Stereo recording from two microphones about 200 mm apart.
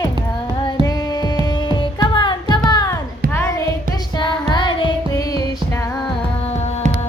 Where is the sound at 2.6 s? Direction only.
20° left (ahead or behind).